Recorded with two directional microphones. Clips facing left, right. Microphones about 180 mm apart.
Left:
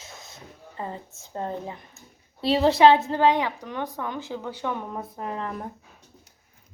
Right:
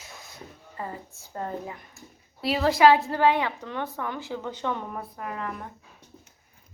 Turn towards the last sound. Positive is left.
turn(degrees=30)  # may be behind; listen again after turning